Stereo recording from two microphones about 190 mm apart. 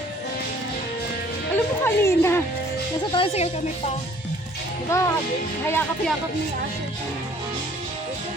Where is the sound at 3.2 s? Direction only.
30° left (ahead or behind).